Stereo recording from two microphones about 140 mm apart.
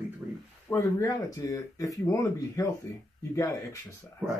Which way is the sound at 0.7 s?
25° left (ahead or behind).